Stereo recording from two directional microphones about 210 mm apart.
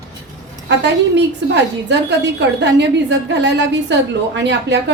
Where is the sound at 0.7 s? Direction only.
55° right (ahead or behind).